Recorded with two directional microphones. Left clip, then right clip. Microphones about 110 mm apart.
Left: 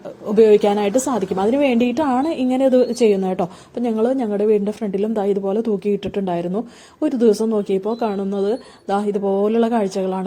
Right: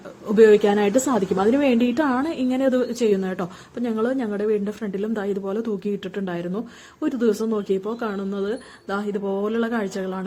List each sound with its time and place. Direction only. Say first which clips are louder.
0.3 s a woman's voice: left 2 dB; 25° left (ahead or behind)